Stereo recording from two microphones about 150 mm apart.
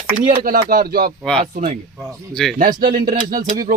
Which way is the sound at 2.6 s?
65° right (ahead or behind).